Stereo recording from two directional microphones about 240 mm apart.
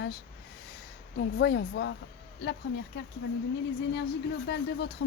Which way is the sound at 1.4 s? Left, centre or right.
Left.